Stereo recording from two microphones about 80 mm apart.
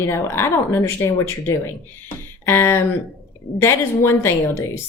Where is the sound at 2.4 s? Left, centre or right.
Left.